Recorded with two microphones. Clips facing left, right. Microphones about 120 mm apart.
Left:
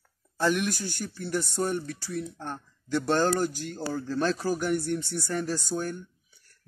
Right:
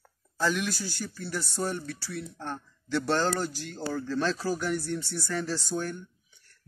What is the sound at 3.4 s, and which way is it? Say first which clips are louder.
Speech: left 4 dB; 50° left (ahead or behind).